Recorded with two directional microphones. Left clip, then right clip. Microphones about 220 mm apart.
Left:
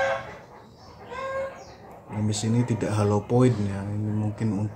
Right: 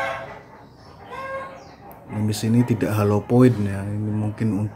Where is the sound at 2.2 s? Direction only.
20° right (ahead or behind).